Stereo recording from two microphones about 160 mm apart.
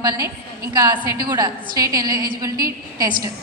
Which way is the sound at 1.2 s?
20° right (ahead or behind).